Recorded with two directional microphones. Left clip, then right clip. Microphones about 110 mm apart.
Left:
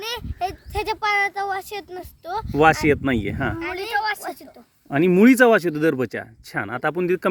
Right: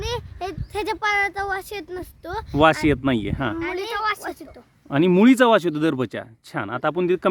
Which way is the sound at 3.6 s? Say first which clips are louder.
Left 2 dB; 35° right (ahead or behind).